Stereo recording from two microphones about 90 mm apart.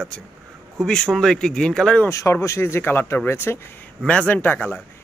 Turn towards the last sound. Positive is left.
turn(degrees=20)  # may be behind; listen again after turning